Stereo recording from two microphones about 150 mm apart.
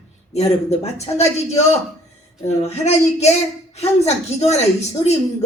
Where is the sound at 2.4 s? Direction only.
45° left (ahead or behind).